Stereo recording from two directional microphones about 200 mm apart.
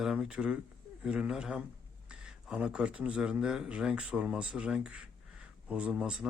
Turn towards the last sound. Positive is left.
turn(degrees=-5)  # may be behind; listen again after turning